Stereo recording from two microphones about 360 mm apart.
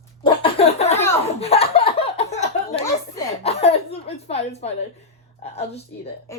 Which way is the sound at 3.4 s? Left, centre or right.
Centre.